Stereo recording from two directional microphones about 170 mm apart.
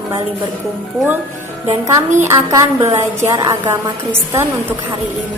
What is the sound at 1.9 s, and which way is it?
A woman's voice, 15° right (ahead or behind).